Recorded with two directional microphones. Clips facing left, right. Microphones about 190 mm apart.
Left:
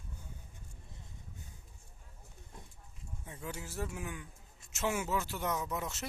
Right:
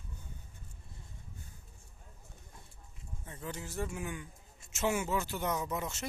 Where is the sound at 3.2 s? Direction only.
10° left (ahead or behind).